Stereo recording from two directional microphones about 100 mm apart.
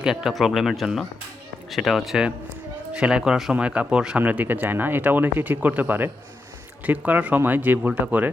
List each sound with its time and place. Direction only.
0.0 s speech: 5° right (ahead or behind)